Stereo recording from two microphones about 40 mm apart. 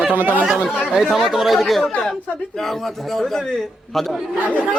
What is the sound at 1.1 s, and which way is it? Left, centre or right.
Speech, centre.